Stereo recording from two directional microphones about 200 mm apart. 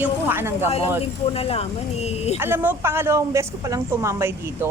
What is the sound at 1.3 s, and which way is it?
Speech, 30° left (ahead or behind).